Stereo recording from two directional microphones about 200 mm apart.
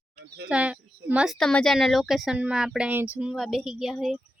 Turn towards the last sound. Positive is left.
turn(degrees=0)  # may be behind; listen again after turning